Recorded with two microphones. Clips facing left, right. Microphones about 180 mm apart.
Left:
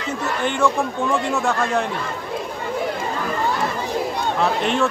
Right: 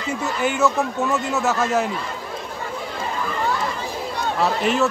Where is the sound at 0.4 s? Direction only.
5° right (ahead or behind).